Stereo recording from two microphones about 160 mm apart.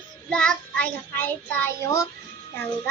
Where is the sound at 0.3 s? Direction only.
5° left (ahead or behind).